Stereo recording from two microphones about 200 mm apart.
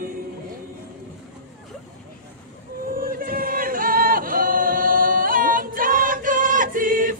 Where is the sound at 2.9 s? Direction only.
45° right (ahead or behind).